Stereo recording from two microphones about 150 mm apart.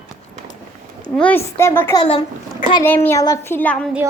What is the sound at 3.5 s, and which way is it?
Speech, 10° left (ahead or behind).